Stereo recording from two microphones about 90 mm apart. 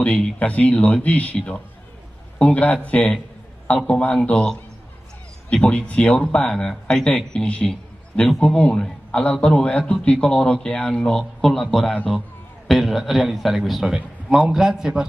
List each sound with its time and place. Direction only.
0.0 s a man's voice: 15° left (ahead or behind); by 15.0 s 5° right (ahead or behind)